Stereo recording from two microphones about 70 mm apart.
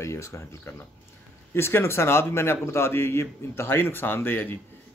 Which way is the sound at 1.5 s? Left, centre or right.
Left.